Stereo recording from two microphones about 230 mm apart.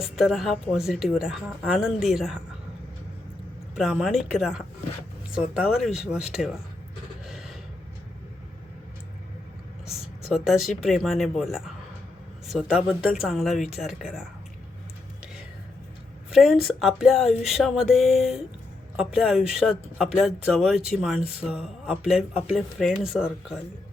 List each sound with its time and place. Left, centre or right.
0.0 s speech: centre
3.8 s speech: centre
7.3 s a sound: centre
10.2 s speech: centre
16.3 s speech: centre